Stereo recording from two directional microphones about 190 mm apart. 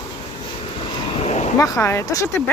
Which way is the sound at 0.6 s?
25° left (ahead or behind).